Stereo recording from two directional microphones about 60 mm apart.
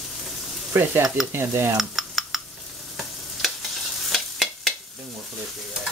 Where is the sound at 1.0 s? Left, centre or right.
Centre.